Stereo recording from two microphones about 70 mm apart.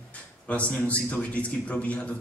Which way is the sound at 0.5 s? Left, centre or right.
Centre.